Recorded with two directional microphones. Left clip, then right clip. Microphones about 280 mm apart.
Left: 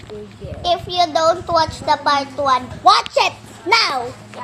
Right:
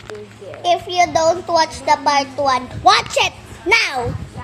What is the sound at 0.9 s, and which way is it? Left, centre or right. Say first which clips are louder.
A woman's voice: left 1 dB; right.